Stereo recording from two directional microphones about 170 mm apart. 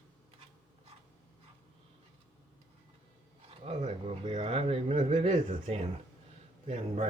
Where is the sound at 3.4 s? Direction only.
35° right (ahead or behind).